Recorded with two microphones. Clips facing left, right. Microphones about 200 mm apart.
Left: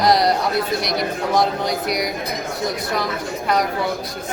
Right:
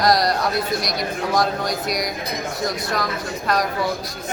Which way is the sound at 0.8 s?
60° left (ahead or behind).